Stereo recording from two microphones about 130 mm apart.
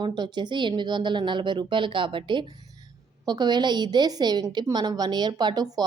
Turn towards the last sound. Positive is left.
turn(degrees=-30)  # may be behind; listen again after turning